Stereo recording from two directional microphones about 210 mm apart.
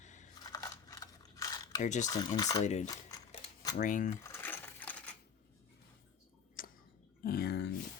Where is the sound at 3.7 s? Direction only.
35° left (ahead or behind).